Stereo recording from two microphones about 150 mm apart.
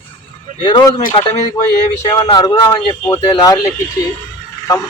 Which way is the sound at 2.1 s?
25° left (ahead or behind).